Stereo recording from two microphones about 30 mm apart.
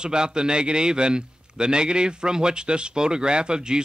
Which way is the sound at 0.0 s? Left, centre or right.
Right.